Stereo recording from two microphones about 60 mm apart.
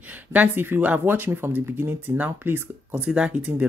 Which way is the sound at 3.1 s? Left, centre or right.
Centre.